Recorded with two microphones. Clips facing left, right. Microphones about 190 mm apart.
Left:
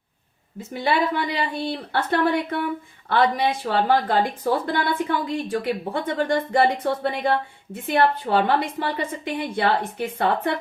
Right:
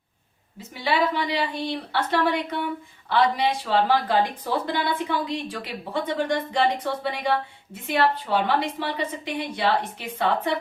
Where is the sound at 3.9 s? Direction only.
50° left (ahead or behind).